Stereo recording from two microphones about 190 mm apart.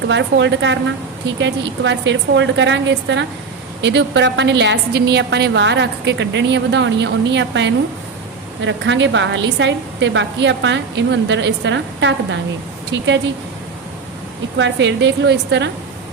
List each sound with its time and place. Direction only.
0.1 s a woman's voice: 70° right (ahead or behind)
14.6 s a woman's voice: 70° right (ahead or behind)